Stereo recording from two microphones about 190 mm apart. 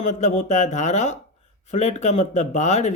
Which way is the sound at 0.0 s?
40° left (ahead or behind).